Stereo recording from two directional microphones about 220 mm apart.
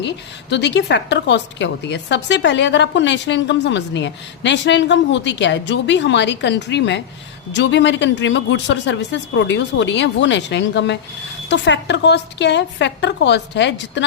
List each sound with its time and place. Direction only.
0.5 s a woman's voice: 50° left (ahead or behind)